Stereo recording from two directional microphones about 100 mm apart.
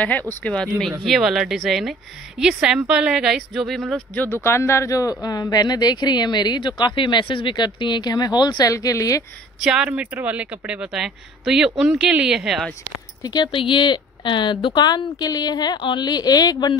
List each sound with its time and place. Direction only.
0.0 s speech: 15° left (ahead or behind)
1.0 s speech: centre (ahead or behind)
4.1 s speech: 20° left (ahead or behind)
9.6 s speech: 5° right (ahead or behind)
13.2 s speech: 45° left (ahead or behind)
13.5 s speech: 60° left (ahead or behind); by 16.7 s 40° left (ahead or behind)